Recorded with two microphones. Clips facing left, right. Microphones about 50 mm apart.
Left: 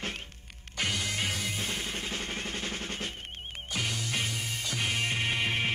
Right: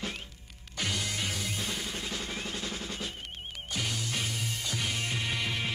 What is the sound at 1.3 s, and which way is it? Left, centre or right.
Music, left.